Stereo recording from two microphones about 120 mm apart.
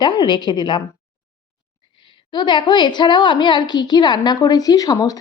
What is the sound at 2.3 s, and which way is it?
A woman's voice, 40° left (ahead or behind).